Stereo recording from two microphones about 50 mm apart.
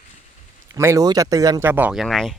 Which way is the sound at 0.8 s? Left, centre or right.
Right.